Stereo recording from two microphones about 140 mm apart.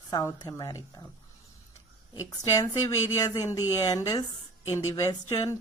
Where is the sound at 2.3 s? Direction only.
25° left (ahead or behind).